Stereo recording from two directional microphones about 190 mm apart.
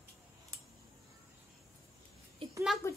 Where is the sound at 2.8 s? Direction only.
15° left (ahead or behind).